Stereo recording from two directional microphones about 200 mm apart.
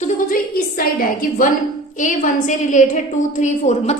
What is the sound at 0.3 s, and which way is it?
A woman's voice, 45° left (ahead or behind).